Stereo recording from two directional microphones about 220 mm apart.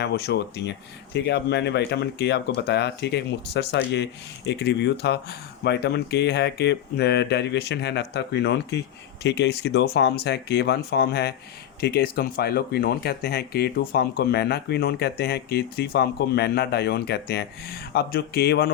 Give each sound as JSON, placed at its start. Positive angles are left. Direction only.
{"t": 0.0, "sound": "speech", "side_deg": 50}